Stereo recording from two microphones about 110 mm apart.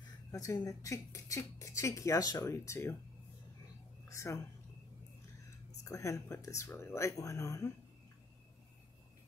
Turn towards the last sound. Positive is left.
turn(degrees=25)  # may be behind; listen again after turning